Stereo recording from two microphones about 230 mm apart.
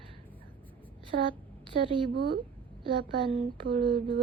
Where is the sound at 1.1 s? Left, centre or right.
Right.